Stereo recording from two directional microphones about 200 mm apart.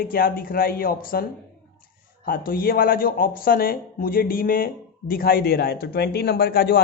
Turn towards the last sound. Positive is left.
turn(degrees=50)  # may be behind; listen again after turning